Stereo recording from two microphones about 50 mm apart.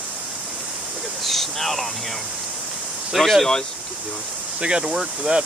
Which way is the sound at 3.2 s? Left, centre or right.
Centre.